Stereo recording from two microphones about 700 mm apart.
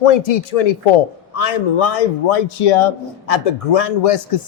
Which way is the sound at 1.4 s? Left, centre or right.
Left.